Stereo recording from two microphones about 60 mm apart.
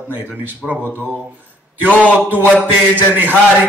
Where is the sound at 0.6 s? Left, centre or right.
Centre.